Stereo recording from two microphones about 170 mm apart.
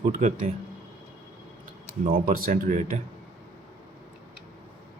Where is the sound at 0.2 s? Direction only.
45° right (ahead or behind).